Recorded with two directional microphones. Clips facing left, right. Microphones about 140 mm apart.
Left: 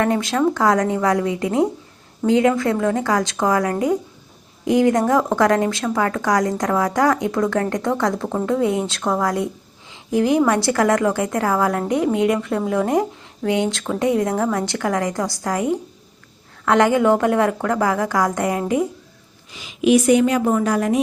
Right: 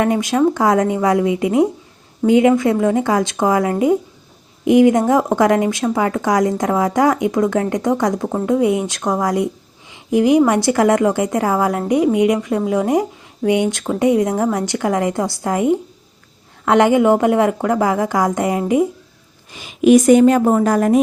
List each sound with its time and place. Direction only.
0.0 s a woman's voice: 15° right (ahead or behind)
19.5 s speech: 50° right (ahead or behind)